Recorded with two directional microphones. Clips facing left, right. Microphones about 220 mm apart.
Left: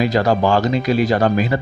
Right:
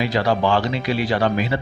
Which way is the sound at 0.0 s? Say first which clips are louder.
Left 4 dB; 45° left (ahead or behind).